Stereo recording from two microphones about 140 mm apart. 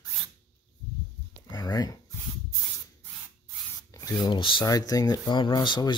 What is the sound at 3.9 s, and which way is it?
Speech, 25° left (ahead or behind).